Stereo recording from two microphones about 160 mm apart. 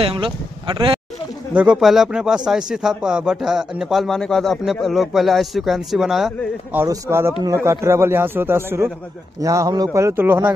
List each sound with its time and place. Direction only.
0.0 s speech: 35° right (ahead or behind)
1.5 s speech: 10° right (ahead or behind)
6.8 s a man's voice: 15° right (ahead or behind)